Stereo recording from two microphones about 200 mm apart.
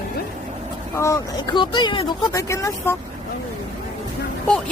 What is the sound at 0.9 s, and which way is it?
Speech, 15° left (ahead or behind).